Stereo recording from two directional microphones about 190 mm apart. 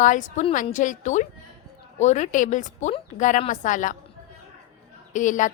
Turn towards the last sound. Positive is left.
turn(degrees=40)  # may be behind; listen again after turning